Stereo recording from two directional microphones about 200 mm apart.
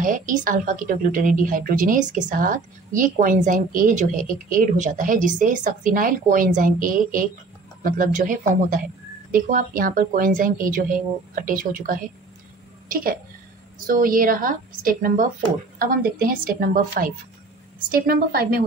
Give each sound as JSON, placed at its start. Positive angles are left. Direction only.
{"t": 0.0, "sound": "a woman's voice", "side_deg": -40}